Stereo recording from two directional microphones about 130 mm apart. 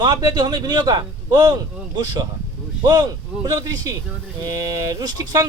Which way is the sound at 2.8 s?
30° right (ahead or behind).